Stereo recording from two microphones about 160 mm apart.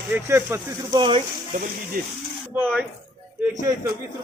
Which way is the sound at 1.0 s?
30° right (ahead or behind).